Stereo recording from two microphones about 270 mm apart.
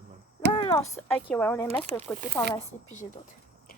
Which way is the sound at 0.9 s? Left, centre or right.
Centre.